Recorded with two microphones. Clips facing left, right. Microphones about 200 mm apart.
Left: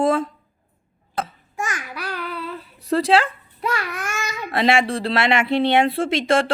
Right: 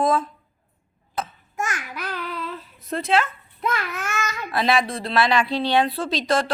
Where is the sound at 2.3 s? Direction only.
35° left (ahead or behind).